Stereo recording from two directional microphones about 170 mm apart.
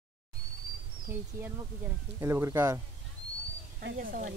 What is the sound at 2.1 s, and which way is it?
Speech, 15° right (ahead or behind).